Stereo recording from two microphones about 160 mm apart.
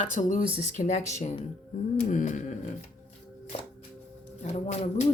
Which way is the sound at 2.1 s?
50° left (ahead or behind).